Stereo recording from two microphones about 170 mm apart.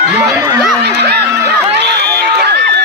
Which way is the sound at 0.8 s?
75° right (ahead or behind).